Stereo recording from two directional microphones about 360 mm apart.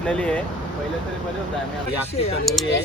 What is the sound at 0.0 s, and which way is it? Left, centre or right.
Speech, centre.